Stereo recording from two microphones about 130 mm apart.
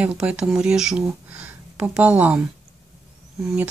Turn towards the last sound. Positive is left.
turn(degrees=-10)  # may be behind; listen again after turning